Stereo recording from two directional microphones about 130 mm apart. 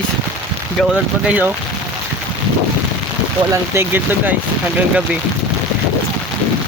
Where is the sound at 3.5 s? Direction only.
15° right (ahead or behind).